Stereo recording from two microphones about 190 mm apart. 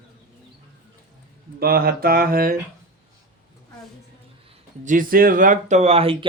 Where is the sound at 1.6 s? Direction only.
50° right (ahead or behind).